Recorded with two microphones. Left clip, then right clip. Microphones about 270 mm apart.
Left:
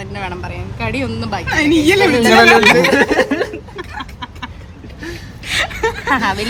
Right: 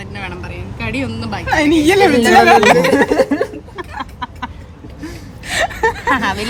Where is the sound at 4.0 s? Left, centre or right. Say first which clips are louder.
Right 5 dB; right.